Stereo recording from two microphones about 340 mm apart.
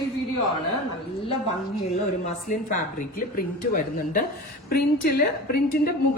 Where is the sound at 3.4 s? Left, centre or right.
Left.